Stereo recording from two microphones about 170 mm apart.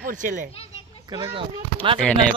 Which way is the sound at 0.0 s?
50° right (ahead or behind).